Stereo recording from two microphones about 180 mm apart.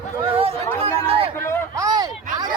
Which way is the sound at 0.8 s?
30° right (ahead or behind).